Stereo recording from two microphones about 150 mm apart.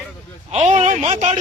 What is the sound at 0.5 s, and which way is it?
Speech, 50° right (ahead or behind).